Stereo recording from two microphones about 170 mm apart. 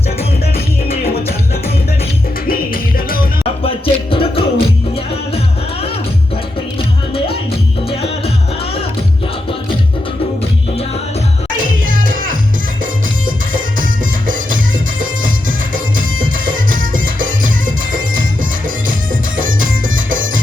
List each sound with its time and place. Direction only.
1.0 s music: 65° left (ahead or behind)
2.5 s music: 60° left (ahead or behind)
3.6 s music: 35° left (ahead or behind)
6.7 s music: 35° left (ahead or behind)
11.5 s music: 55° right (ahead or behind)
19.4 s music: 55° right (ahead or behind)